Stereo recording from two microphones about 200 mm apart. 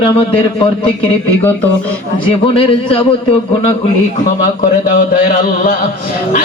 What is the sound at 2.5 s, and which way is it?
Speech, 25° left (ahead or behind).